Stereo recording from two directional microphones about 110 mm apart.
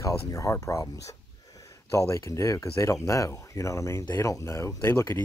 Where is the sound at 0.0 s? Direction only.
30° left (ahead or behind).